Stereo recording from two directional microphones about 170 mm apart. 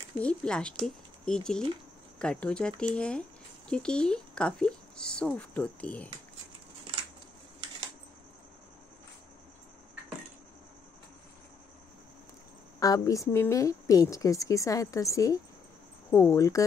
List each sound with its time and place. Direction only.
0.2 s speech: 5° left (ahead or behind)
12.8 s a woman's voice: 20° left (ahead or behind)